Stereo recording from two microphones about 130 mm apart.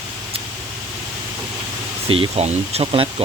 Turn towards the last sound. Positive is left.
turn(degrees=-45)  # may be behind; listen again after turning